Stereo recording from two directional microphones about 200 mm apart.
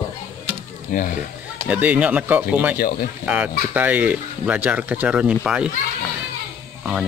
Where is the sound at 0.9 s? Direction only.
45° left (ahead or behind).